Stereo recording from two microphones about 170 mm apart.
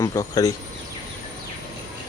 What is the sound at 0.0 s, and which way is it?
Speech, 20° left (ahead or behind).